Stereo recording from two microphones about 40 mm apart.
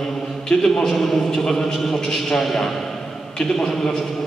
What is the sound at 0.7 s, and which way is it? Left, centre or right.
A man's voice, centre.